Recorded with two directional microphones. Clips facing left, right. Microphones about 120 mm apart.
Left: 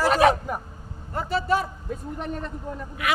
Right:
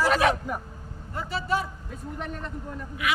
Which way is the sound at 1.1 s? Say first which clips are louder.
Left 4 dB; 50° left (ahead or behind).